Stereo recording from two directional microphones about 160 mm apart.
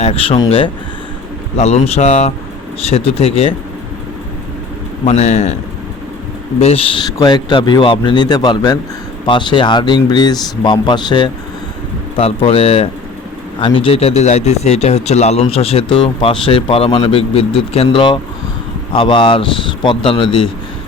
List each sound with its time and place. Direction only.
0.0 s speech: 35° left (ahead or behind)
1.5 s speech: 40° left (ahead or behind)
5.0 s speech: 45° left (ahead or behind)
6.6 s a man's voice: 40° left (ahead or behind)